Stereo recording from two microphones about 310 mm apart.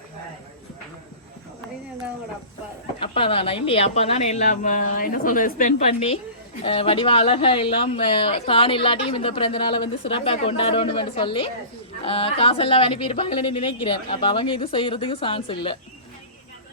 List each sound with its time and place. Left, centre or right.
3.0 s speech: centre